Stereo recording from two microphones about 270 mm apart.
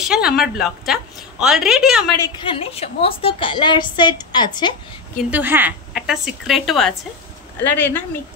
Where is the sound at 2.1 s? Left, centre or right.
Centre.